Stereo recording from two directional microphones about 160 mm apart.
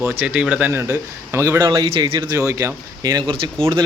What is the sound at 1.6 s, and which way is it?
Speech, 25° right (ahead or behind).